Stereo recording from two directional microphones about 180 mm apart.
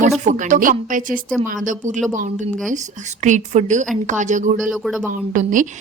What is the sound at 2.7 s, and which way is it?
A woman's voice, 45° right (ahead or behind).